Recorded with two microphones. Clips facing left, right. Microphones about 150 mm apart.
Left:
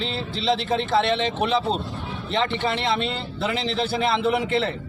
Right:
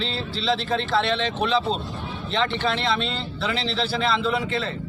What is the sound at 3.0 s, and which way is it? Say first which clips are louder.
Speech: left 2 dB; 55° left (ahead or behind).